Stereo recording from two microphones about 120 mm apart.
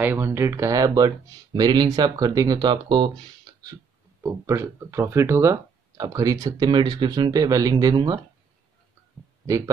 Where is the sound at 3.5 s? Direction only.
35° right (ahead or behind).